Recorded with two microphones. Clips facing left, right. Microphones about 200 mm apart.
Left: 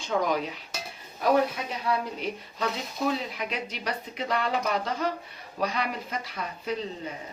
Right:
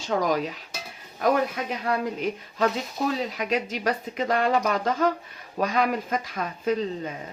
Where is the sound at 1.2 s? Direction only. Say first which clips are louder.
Right 1 dB; 50° right (ahead or behind).